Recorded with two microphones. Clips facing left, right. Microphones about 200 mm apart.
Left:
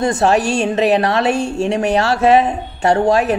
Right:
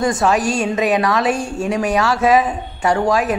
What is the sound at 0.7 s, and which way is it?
A woman's voice, 30° left (ahead or behind).